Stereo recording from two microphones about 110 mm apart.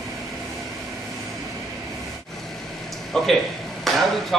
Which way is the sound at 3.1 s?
5° left (ahead or behind).